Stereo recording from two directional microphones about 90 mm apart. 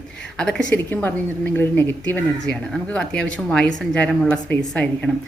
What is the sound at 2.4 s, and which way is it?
A woman's voice, 10° left (ahead or behind).